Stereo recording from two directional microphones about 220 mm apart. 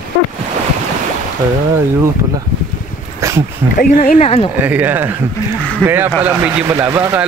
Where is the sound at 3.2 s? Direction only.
15° right (ahead or behind).